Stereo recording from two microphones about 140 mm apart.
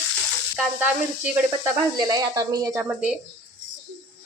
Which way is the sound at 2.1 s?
25° right (ahead or behind).